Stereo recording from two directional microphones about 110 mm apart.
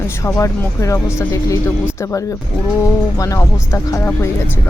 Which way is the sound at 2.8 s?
30° left (ahead or behind).